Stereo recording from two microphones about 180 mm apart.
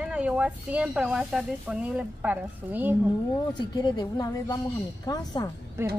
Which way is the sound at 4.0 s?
20° left (ahead or behind).